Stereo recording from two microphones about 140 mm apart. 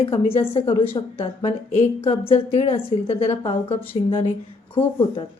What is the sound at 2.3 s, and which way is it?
A woman's voice, 45° left (ahead or behind).